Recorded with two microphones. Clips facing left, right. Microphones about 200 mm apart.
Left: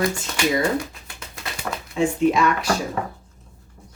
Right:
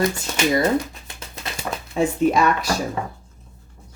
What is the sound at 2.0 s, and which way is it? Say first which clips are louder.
Speech: right 1 dB; 40° right (ahead or behind).